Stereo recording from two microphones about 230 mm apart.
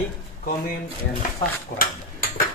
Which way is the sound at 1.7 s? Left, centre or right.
Left.